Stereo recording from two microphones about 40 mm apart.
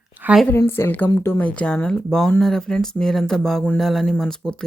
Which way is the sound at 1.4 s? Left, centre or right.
Left.